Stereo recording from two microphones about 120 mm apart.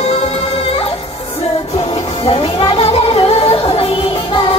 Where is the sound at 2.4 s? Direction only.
55° left (ahead or behind).